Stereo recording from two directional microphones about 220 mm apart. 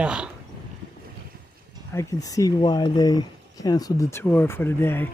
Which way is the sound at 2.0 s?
15° left (ahead or behind).